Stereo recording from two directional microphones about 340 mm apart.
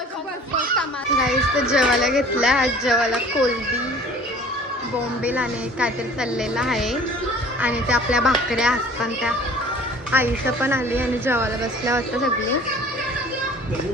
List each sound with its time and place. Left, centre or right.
1.2 s speech: centre
5.2 s speech: centre
10.1 s a woman's voice: centre